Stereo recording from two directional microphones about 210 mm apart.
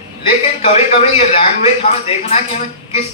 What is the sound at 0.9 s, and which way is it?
A man's voice, 30° left (ahead or behind).